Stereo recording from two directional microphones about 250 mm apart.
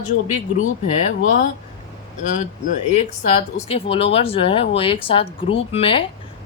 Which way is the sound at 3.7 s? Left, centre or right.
Left.